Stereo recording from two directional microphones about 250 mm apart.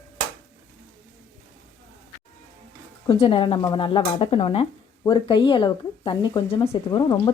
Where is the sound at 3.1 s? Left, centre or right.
Left.